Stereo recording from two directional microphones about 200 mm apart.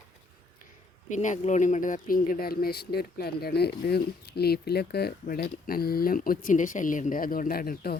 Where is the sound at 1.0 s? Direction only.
40° left (ahead or behind).